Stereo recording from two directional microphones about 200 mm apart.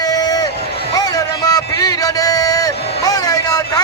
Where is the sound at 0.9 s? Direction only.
20° left (ahead or behind).